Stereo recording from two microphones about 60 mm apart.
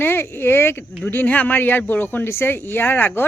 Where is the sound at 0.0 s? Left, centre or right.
Left.